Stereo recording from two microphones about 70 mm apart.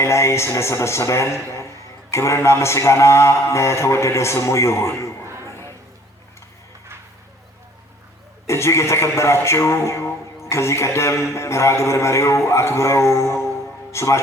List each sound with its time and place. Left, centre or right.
0.0 s a man's voice: left
5.2 s a sound: right
8.4 s a man's voice: left